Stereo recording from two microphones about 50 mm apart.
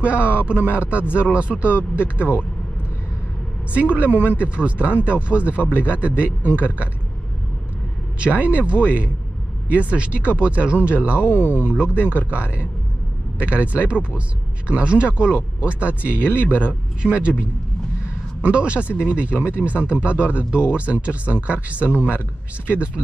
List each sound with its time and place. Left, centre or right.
0.0 s speech: right
3.7 s speech: right
4.1 s speech: left
4.4 s speech: right
8.2 s speech: right
11.2 s speech: left
12.1 s speech: right
18.4 s speech: right
21.8 s speech: left